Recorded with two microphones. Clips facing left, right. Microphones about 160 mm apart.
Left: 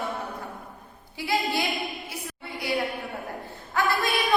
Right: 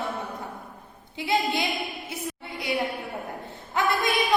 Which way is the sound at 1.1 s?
20° right (ahead or behind).